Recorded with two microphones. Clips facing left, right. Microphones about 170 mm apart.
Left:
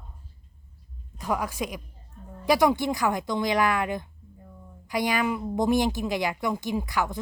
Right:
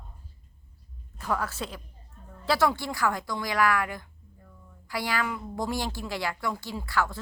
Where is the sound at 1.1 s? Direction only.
15° left (ahead or behind).